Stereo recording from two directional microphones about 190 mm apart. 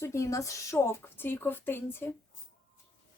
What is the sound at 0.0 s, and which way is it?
A woman's voice, 15° left (ahead or behind).